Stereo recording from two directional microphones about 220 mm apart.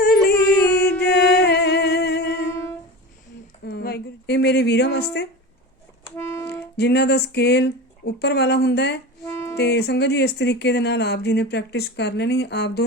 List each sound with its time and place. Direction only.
0.0 s a sound: 45° left (ahead or behind)
1.0 s music: 50° left (ahead or behind)
3.7 s a sound: 50° left (ahead or behind)
6.1 s music: 10° left (ahead or behind)
6.7 s speech: 50° left (ahead or behind)
9.2 s music: 15° left (ahead or behind)
9.6 s speech: 50° left (ahead or behind)